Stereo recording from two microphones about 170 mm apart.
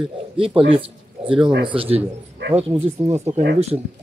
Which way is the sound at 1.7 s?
35° right (ahead or behind).